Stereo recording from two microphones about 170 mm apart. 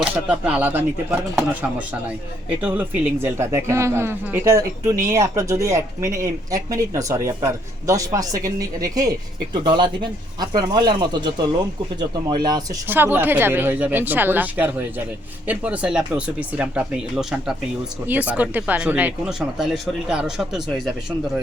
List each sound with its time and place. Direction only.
0.0 s speech: 10° right (ahead or behind)
2.6 s speech: 10° right (ahead or behind); by 12.6 s 25° right (ahead or behind)
12.9 s speech: 10° right (ahead or behind)